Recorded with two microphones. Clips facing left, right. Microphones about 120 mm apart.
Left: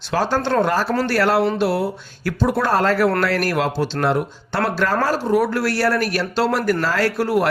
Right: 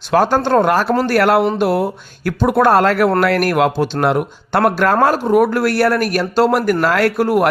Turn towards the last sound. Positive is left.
turn(degrees=-50)  # may be behind; listen again after turning